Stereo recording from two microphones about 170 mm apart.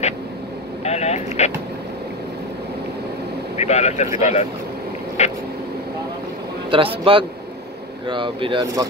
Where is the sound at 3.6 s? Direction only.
40° left (ahead or behind).